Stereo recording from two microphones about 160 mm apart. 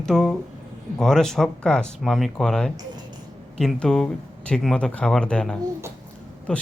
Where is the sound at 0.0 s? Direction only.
Centre (ahead or behind).